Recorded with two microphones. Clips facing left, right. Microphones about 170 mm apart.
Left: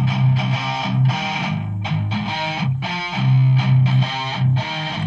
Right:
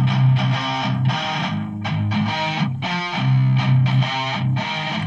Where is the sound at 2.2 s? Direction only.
25° left (ahead or behind).